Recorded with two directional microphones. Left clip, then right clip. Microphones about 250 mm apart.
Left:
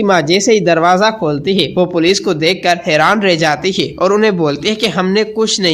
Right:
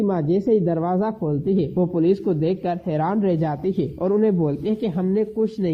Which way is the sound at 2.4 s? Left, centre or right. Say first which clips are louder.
Left 11 dB; centre.